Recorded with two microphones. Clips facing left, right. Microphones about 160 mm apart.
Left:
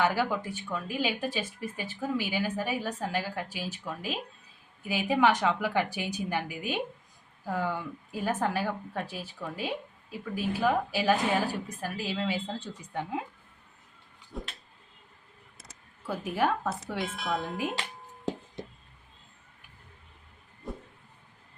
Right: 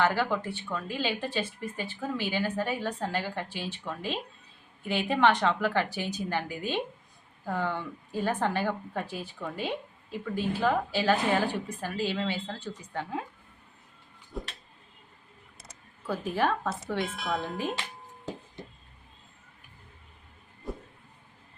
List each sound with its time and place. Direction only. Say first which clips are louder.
0.0 s speech: right 1 dB; 10° left (ahead or behind)
12.5 s speech: even; 15° left (ahead or behind)
14.3 s a sound: right 2 dB; centre (ahead or behind)
15.5 s speech: right 2 dB; centre (ahead or behind)
20.7 s vehicle: right 2 dB; centre (ahead or behind)